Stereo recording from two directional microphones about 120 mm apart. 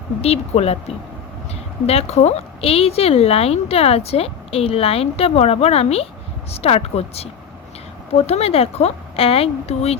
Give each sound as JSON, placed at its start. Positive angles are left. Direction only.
{"t": 0.2, "sound": "speech", "side_deg": 60}
{"t": 8.3, "sound": "speech", "side_deg": 60}